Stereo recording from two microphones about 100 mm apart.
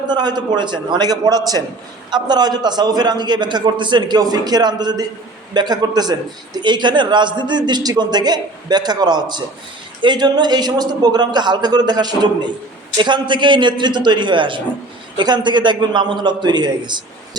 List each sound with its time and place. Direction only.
0.1 s a man's voice: 45° right (ahead or behind)